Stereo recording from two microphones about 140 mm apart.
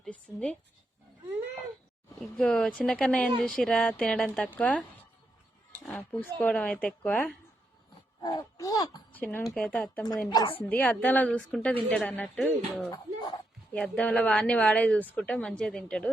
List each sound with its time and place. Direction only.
0.0 s a woman's voice: 5° left (ahead or behind)
2.4 s a woman's voice: 5° left (ahead or behind)
6.0 s a woman's voice: 10° left (ahead or behind)
8.2 s speech: 30° left (ahead or behind)
9.1 s a woman's voice: 15° left (ahead or behind)
10.2 s speech: 35° left (ahead or behind)
10.6 s a woman's voice: 10° left (ahead or behind)
12.9 s a sound: 30° left (ahead or behind)
13.7 s a woman's voice: 10° left (ahead or behind)